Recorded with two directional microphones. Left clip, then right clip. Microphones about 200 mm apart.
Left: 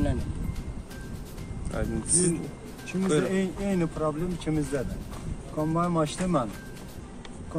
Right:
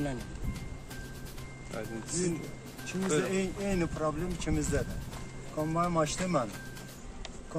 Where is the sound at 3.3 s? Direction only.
5° left (ahead or behind).